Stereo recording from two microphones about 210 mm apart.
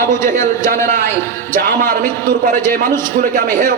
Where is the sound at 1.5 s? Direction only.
40° right (ahead or behind).